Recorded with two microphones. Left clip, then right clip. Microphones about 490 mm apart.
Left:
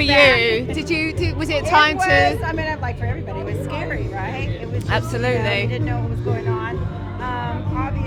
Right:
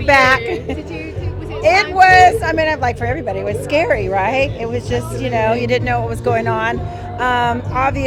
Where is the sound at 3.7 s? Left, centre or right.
Right.